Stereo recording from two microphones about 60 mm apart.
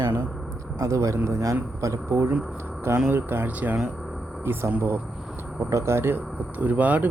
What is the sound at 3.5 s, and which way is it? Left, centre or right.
Speech, right.